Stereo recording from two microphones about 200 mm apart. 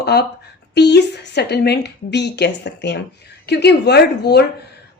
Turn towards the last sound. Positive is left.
turn(degrees=55)  # may be behind; listen again after turning